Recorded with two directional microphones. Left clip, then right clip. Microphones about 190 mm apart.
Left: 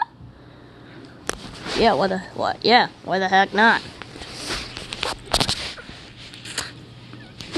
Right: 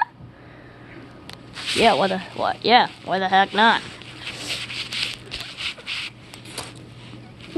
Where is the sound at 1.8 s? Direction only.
10° left (ahead or behind).